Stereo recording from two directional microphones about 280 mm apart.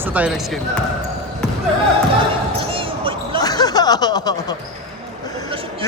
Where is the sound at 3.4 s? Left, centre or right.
Centre.